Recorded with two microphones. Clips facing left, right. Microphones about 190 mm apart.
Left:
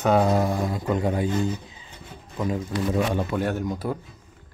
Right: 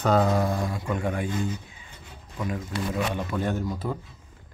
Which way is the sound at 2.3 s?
25° left (ahead or behind).